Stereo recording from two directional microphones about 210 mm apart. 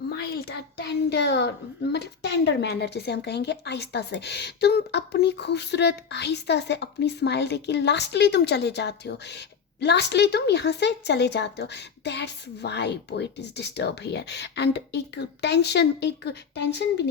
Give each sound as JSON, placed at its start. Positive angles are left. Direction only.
{"t": 0.1, "sound": "a child's voice", "side_deg": 50}